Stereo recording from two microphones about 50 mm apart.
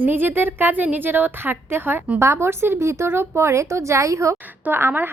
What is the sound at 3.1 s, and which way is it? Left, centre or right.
A woman's voice, right.